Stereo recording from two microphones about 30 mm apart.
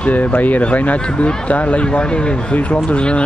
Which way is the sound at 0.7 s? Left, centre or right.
Left.